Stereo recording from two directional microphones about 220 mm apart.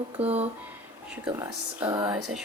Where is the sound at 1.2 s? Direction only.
15° right (ahead or behind).